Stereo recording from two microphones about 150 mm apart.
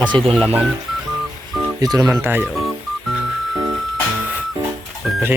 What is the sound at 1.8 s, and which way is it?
Speech, 25° right (ahead or behind).